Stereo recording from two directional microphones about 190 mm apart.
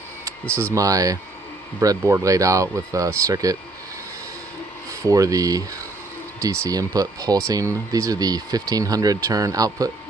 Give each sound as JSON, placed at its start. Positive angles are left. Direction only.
{"t": 0.6, "sound": "speech", "side_deg": -15}
{"t": 5.0, "sound": "speech", "side_deg": -15}